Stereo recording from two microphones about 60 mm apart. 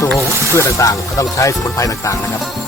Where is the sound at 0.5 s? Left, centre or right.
Left.